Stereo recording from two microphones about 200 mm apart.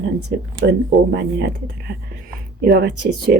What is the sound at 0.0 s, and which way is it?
Speech, 60° right (ahead or behind).